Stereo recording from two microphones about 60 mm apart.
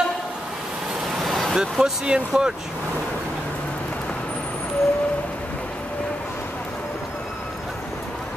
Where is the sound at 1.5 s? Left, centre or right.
Centre.